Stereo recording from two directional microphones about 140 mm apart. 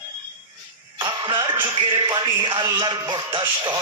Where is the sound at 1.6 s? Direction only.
35° right (ahead or behind).